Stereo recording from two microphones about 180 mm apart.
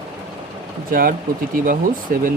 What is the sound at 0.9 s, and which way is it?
Speech, 55° right (ahead or behind).